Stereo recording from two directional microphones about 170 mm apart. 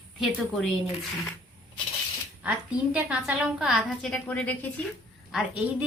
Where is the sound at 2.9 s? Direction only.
5° right (ahead or behind); by 4.5 s 10° left (ahead or behind).